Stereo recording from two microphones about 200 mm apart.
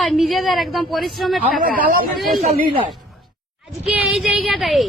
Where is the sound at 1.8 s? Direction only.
45° right (ahead or behind).